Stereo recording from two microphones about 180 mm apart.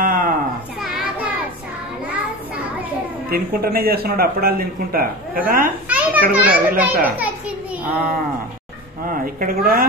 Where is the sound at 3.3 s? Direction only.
55° right (ahead or behind).